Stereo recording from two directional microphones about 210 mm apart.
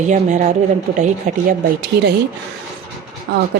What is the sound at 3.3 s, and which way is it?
Speech, 50° right (ahead or behind).